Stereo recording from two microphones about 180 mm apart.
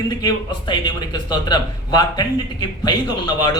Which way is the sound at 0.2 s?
25° left (ahead or behind).